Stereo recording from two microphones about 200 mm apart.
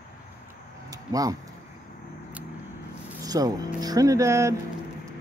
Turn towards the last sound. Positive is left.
turn(degrees=-15)  # may be behind; listen again after turning